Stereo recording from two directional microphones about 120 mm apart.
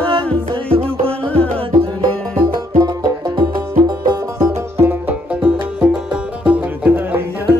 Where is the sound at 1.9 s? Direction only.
30° right (ahead or behind).